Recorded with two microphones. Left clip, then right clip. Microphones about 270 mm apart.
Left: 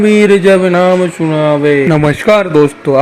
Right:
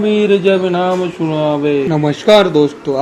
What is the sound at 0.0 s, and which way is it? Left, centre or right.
A man's voice, left.